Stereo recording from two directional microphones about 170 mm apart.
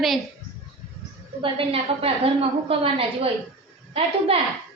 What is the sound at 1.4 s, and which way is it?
A woman's voice, 30° right (ahead or behind).